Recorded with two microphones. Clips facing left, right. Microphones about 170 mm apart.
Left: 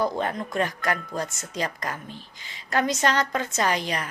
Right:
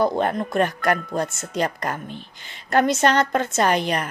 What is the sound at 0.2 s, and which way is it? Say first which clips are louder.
A woman's voice: right 5 dB; 55° right (ahead or behind).